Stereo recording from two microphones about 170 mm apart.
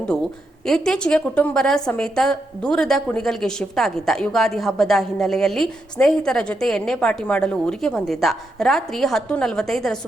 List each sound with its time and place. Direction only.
0.1 s a woman's voice: 5° left (ahead or behind)